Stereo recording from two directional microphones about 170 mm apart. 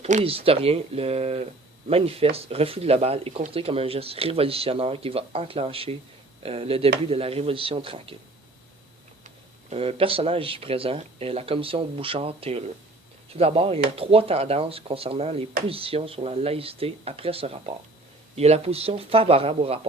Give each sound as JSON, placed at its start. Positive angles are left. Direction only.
{"t": 0.0, "sound": "speech", "side_deg": -40}
{"t": 9.2, "sound": "speech", "side_deg": -40}